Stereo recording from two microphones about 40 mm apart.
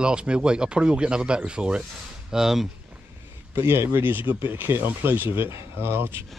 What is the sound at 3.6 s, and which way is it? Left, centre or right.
Speech, right.